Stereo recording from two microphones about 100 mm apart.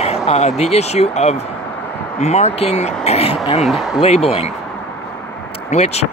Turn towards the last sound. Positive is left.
turn(degrees=90)